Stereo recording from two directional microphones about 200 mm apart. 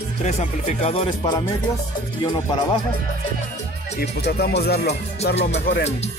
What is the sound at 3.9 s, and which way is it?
Speech, 55° left (ahead or behind).